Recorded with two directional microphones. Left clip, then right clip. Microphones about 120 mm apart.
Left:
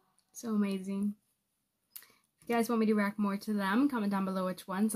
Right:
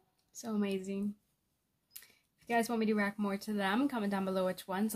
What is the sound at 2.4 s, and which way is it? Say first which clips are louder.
Speech: left 2 dB; 15° right (ahead or behind).